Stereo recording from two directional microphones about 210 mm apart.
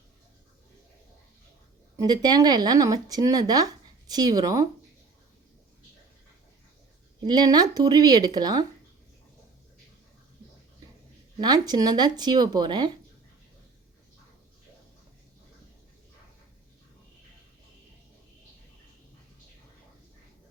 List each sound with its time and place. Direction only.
2.0 s speech: 20° right (ahead or behind)
7.3 s speech: 20° right (ahead or behind)
11.3 s speech: 20° right (ahead or behind)